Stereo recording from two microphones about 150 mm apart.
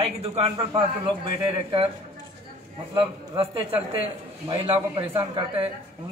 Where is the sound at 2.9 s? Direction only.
40° right (ahead or behind).